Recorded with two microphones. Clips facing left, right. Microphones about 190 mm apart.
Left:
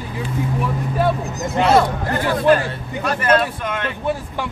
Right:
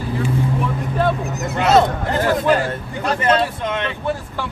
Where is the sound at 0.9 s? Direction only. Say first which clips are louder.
Even; 10° left (ahead or behind).